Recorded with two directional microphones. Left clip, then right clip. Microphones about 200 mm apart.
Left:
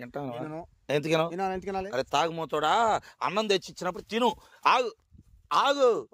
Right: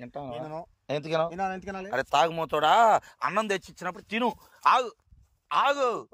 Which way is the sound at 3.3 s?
20° left (ahead or behind).